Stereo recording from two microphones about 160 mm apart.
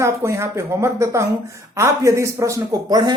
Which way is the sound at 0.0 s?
15° right (ahead or behind).